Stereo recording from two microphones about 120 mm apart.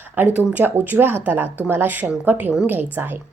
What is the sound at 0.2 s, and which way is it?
A woman's voice, 15° right (ahead or behind).